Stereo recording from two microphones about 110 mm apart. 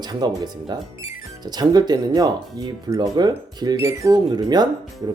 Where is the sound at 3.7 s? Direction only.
25° right (ahead or behind).